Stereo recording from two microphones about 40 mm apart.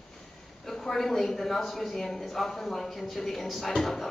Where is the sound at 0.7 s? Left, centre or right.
Centre.